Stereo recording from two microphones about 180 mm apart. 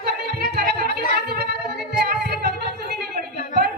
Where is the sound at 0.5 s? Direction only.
60° right (ahead or behind).